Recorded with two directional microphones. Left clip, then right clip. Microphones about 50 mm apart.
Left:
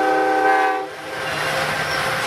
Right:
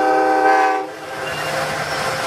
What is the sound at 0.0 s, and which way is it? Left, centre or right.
Train, centre.